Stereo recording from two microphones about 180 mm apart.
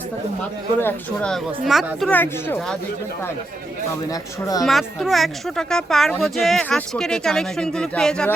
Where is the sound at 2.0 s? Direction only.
10° left (ahead or behind).